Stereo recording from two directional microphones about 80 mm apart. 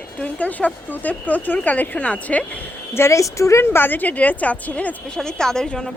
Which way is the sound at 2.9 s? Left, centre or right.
Left.